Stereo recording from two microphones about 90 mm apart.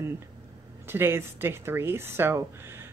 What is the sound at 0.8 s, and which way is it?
Speech, 25° right (ahead or behind).